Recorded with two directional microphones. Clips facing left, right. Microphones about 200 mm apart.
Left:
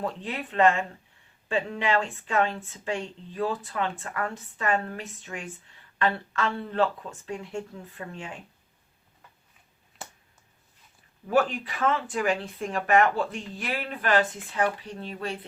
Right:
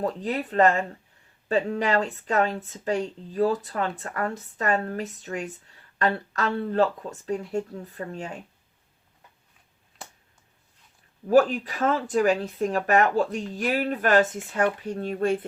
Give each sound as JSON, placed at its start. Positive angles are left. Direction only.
{"t": 0.0, "sound": "speech", "side_deg": -40}
{"t": 11.3, "sound": "speech", "side_deg": -40}